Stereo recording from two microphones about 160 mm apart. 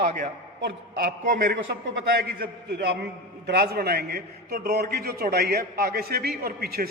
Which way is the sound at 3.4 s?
80° right.